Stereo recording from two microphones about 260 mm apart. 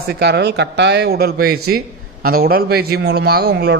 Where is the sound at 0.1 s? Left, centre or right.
Right.